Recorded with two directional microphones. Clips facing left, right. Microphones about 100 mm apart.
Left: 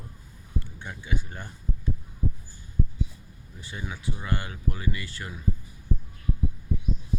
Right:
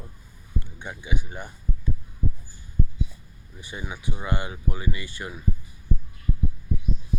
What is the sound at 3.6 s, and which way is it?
Speech, 15° right (ahead or behind).